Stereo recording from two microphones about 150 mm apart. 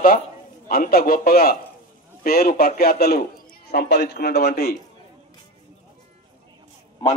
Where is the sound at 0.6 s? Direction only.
75° left (ahead or behind).